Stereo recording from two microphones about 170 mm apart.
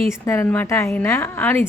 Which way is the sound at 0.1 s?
15° left (ahead or behind).